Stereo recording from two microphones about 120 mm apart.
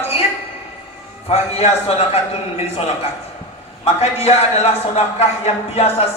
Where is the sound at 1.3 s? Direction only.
60° left (ahead or behind).